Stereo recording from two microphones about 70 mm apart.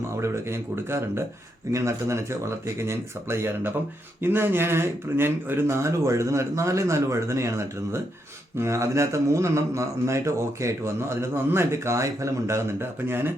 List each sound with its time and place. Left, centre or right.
0.2 s speech: right
1.7 s mantra: right
4.2 s speech: right
5.6 s mantra: right